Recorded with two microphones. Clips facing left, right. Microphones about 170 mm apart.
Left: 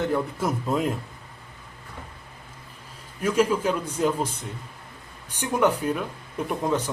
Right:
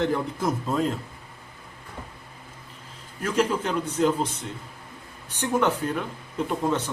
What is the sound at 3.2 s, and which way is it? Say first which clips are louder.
A man's voice: left 2 dB; 10° left (ahead or behind).